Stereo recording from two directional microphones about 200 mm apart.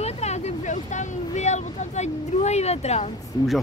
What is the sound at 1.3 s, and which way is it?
Speech, 35° left (ahead or behind).